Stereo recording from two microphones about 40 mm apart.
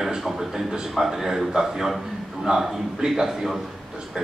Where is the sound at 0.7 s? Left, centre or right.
Centre.